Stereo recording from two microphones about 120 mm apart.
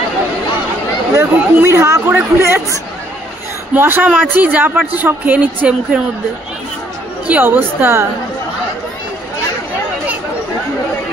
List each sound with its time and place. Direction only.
1.1 s speech: 20° right (ahead or behind)
3.7 s speech: 15° right (ahead or behind)
7.2 s speech: 15° right (ahead or behind)